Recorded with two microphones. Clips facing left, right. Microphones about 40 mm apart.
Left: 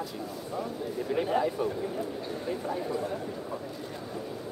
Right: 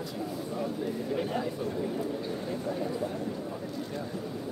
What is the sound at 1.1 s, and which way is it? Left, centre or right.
Speech, centre.